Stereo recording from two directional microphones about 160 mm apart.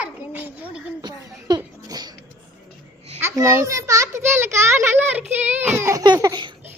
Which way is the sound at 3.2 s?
15° right (ahead or behind).